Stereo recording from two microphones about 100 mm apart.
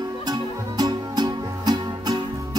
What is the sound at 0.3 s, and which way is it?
Music, 40° right (ahead or behind).